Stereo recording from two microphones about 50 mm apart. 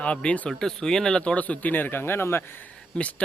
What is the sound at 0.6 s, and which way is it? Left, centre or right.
Speech, centre.